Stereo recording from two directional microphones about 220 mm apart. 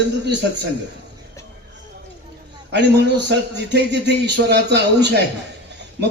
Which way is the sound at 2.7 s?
50° right (ahead or behind).